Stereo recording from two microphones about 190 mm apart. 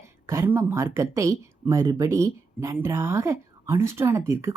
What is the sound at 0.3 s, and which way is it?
Speech, 15° right (ahead or behind).